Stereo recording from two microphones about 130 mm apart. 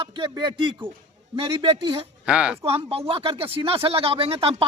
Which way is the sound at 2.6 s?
45° right (ahead or behind).